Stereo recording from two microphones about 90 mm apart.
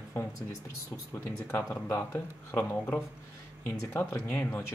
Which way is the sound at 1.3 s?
30° left (ahead or behind).